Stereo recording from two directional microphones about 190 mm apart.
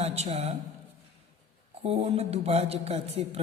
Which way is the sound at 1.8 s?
30° right (ahead or behind).